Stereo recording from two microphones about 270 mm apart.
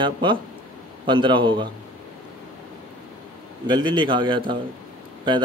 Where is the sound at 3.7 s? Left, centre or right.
Centre.